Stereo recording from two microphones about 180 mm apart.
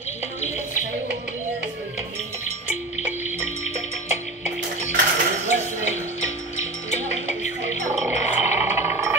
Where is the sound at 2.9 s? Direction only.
40° left (ahead or behind).